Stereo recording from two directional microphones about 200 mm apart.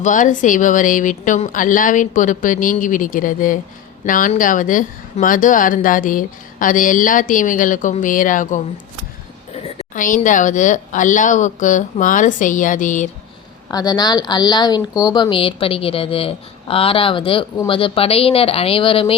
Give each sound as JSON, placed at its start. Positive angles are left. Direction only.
{"t": 0.0, "sound": "a woman's voice", "side_deg": 40}
{"t": 9.6, "sound": "a woman's voice", "side_deg": 35}
{"t": 13.7, "sound": "a woman's voice", "side_deg": 20}